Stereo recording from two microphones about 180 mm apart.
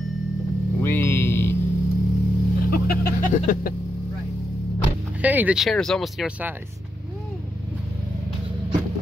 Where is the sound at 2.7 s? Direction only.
55° left (ahead or behind).